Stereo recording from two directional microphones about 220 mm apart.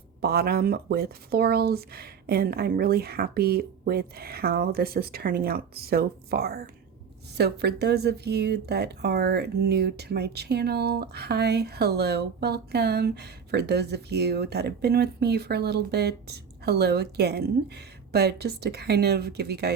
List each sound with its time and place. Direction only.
0.2 s speech: 45° right (ahead or behind)